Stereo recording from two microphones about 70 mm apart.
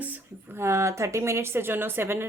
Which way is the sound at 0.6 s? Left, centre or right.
Right.